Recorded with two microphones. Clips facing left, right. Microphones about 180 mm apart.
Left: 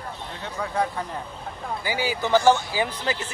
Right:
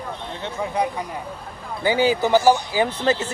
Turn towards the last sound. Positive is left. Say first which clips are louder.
# right 6 dB
turn(degrees=-30)  # may be behind; listen again after turning